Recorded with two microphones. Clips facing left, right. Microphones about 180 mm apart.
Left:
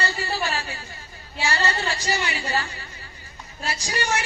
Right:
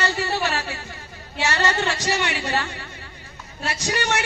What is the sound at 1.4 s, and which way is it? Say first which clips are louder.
A woman's voice: right 3 dB; 70° right (ahead or behind).